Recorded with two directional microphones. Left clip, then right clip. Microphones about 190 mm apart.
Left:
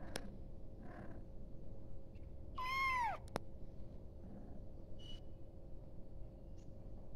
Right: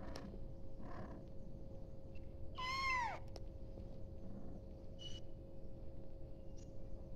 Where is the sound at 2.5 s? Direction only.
25° left (ahead or behind).